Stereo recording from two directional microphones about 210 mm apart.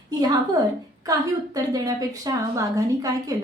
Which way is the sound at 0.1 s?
20° right (ahead or behind).